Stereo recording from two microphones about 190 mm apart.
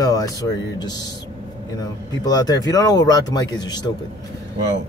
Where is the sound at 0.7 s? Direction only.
20° left (ahead or behind).